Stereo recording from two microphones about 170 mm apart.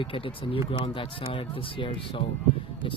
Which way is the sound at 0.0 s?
30° left (ahead or behind).